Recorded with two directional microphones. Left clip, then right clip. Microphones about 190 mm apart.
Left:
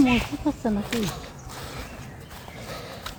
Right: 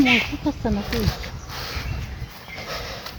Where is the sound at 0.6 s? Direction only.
40° right (ahead or behind).